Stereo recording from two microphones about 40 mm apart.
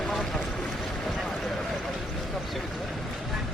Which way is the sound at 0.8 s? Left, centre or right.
Centre.